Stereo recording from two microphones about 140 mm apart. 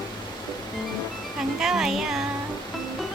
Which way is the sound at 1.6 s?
5° right (ahead or behind).